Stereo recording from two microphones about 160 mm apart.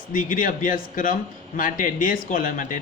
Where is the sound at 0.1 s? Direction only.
55° left (ahead or behind).